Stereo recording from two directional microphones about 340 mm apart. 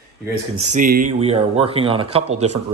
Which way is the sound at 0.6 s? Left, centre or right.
Right.